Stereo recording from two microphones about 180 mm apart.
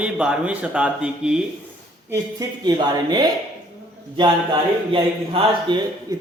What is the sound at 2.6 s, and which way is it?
Speech, 20° right (ahead or behind).